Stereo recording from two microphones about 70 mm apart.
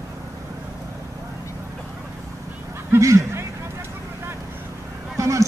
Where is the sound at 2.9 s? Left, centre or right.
Right.